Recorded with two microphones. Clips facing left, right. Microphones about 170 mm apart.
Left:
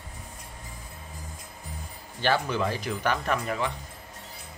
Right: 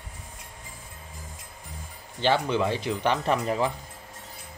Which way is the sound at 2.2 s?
20° right (ahead or behind).